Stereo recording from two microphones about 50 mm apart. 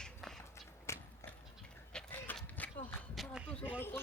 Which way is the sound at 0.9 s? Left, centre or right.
Left.